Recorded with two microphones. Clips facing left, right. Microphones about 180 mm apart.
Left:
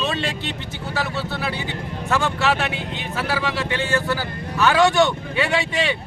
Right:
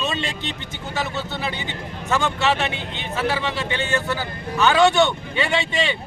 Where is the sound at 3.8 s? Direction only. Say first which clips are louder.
Left 1 dB; 20° right (ahead or behind).